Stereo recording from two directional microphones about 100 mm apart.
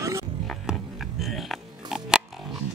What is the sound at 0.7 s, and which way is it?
Biting, centre (ahead or behind).